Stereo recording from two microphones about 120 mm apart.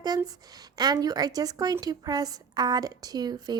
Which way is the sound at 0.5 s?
35° right (ahead or behind).